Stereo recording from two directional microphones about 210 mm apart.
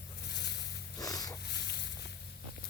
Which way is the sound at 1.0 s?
15° left (ahead or behind).